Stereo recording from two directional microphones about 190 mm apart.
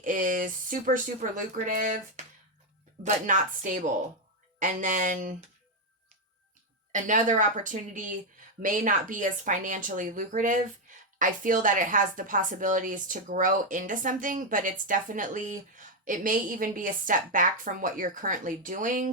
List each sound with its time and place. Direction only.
0.0 s a woman's voice: 45° right (ahead or behind)
6.9 s a woman's voice: 45° right (ahead or behind)